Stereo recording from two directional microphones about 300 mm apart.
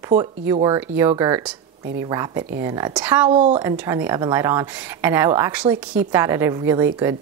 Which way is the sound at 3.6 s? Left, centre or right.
Centre.